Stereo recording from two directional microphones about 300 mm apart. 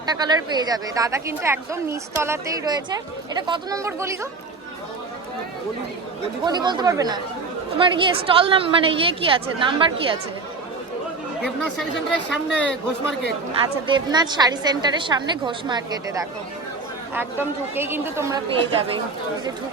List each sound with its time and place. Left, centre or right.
0.1 s a woman's voice: centre
6.4 s a woman's voice: centre
11.4 s speech: centre
13.8 s a woman's voice: centre